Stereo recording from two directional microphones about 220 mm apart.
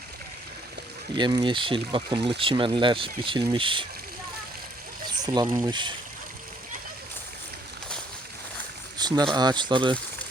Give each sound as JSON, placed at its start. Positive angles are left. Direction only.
{"t": 1.1, "sound": "speech", "side_deg": -20}
{"t": 5.0, "sound": "speech", "side_deg": -20}
{"t": 9.0, "sound": "boat", "side_deg": -20}
{"t": 9.3, "sound": "speech", "side_deg": -20}